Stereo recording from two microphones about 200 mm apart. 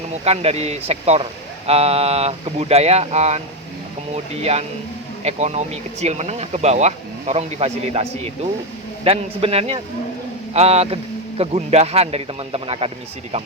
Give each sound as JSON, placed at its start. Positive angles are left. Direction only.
{"t": 0.3, "sound": "speech", "side_deg": -30}
{"t": 9.0, "sound": "a man's voice", "side_deg": -30}